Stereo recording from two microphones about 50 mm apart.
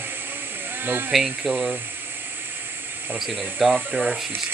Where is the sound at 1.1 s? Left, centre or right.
Centre.